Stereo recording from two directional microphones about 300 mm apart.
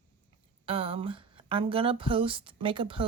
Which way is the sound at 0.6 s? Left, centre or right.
Centre.